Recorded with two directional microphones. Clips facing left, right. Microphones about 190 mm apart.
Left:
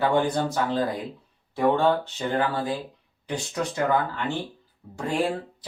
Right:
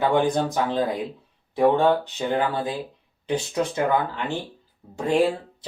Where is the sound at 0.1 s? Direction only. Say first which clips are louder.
Right 2 dB; 20° right (ahead or behind).